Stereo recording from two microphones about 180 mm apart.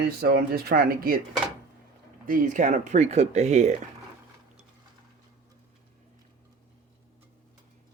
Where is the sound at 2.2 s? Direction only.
50° right (ahead or behind).